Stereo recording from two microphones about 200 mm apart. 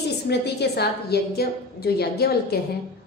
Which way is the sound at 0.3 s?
55° left (ahead or behind).